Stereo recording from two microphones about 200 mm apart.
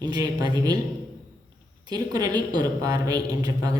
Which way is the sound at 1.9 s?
20° right (ahead or behind).